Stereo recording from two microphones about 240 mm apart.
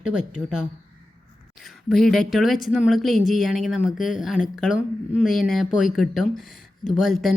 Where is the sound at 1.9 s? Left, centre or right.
Centre.